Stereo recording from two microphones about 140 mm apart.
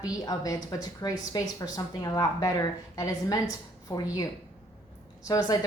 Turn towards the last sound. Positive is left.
turn(degrees=30)  # may be behind; listen again after turning